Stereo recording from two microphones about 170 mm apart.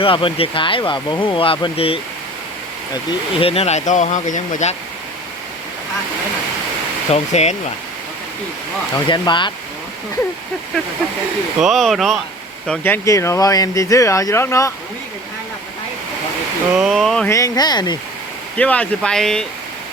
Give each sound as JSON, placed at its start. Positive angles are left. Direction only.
{"t": 0.0, "sound": "speech", "side_deg": 30}
{"t": 3.1, "sound": "speech", "side_deg": 30}
{"t": 7.1, "sound": "speech", "side_deg": 40}
{"t": 9.0, "sound": "speech", "side_deg": 25}
{"t": 11.6, "sound": "speech", "side_deg": 0}
{"t": 16.7, "sound": "speech", "side_deg": 0}
{"t": 17.2, "sound": "speech", "side_deg": 20}
{"t": 18.5, "sound": "speech", "side_deg": 5}